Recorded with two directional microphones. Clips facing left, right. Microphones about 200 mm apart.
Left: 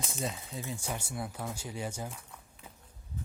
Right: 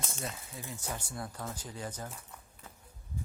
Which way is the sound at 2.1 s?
Centre (ahead or behind).